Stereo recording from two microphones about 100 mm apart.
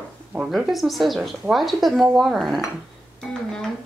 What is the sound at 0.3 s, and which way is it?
Speech, 5° right (ahead or behind).